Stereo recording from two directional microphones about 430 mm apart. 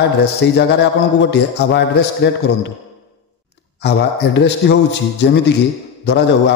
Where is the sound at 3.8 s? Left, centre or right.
Left.